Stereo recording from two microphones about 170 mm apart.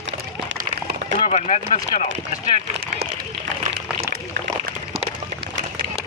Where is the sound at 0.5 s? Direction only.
65° right (ahead or behind).